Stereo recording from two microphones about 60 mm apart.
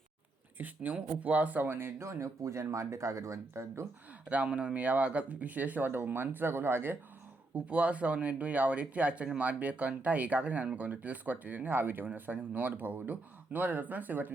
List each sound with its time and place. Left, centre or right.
0.6 s speech: right
2.0 s speech: right
4.3 s speech: right
7.5 s speech: right